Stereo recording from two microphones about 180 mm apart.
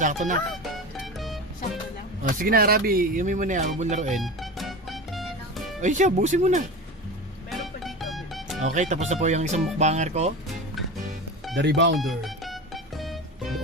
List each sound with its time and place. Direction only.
0.0 s speech: 45° right (ahead or behind)
0.5 s music: centre (ahead or behind)
2.4 s speech: 55° right (ahead or behind)
4.2 s music: centre (ahead or behind)
5.8 s speech: 40° right (ahead or behind)
7.5 s music: centre (ahead or behind)
8.6 s speech: 45° right (ahead or behind)
11.5 s speech: 75° right (ahead or behind)
11.9 s music: centre (ahead or behind)